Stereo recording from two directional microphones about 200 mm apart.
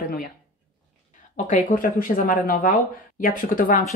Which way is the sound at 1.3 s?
40° left (ahead or behind).